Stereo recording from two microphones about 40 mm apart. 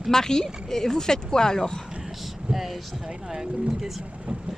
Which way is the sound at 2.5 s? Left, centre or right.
Centre.